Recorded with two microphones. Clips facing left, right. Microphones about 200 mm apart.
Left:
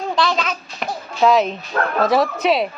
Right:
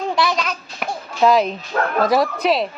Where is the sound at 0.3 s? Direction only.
Centre (ahead or behind).